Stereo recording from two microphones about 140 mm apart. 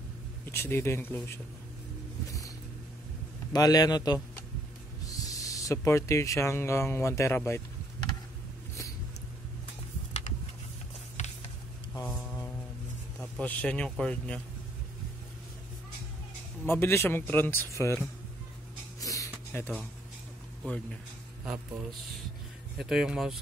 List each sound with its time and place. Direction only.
0.5 s a man's voice: 15° left (ahead or behind)
2.2 s music: 25° left (ahead or behind)
3.5 s a man's voice: 25° left (ahead or behind)
11.2 s a sound: 55° left (ahead or behind)
11.9 s a sound: 15° left (ahead or behind)
13.2 s a man's voice: 10° left (ahead or behind)
16.6 s a man's voice: 15° left (ahead or behind)
18.9 s a sound: 25° left (ahead or behind)
20.6 s a man's voice: 10° left (ahead or behind)
22.8 s speech: 5° right (ahead or behind)